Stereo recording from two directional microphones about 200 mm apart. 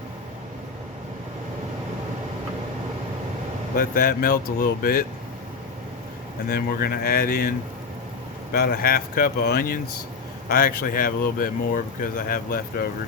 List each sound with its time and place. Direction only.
3.8 s speech: 45° left (ahead or behind)
6.5 s speech: 50° left (ahead or behind)
8.5 s speech: 50° left (ahead or behind)